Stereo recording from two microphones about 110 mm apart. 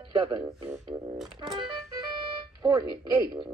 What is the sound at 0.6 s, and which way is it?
Music, 20° right (ahead or behind).